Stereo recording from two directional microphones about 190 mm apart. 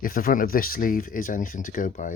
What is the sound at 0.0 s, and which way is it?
Speech, 50° left (ahead or behind).